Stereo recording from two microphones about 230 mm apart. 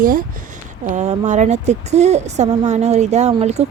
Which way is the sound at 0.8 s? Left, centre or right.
Right.